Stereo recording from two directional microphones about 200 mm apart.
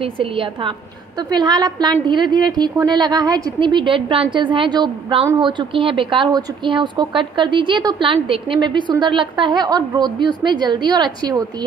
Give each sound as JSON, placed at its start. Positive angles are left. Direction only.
{"t": 0.0, "sound": "a woman's voice", "side_deg": -25}